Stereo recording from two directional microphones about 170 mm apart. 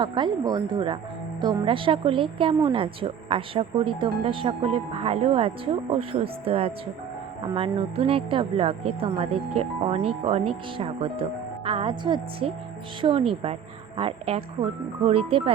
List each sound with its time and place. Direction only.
0.0 s a woman's voice: 25° right (ahead or behind)